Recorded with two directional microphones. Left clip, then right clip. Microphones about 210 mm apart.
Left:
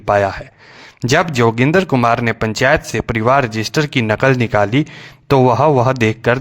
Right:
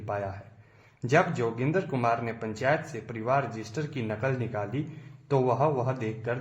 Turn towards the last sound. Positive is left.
turn(degrees=55)  # may be behind; listen again after turning